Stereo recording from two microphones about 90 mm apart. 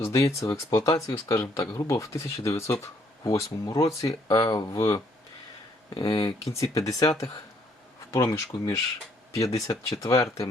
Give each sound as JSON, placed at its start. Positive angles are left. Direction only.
{"t": 0.0, "sound": "speech", "side_deg": 35}
{"t": 4.3, "sound": "speech", "side_deg": 55}
{"t": 4.7, "sound": "speech", "side_deg": 35}
{"t": 6.0, "sound": "speech", "side_deg": 55}
{"t": 6.5, "sound": "speech", "side_deg": 35}